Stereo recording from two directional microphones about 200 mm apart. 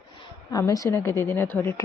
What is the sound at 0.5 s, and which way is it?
A woman's voice, 15° left (ahead or behind).